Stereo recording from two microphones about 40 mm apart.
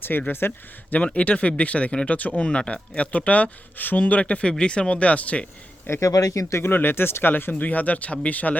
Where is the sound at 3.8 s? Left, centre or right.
Left.